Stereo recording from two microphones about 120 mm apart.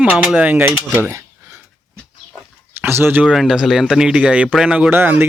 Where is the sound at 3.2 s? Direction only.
5° right (ahead or behind).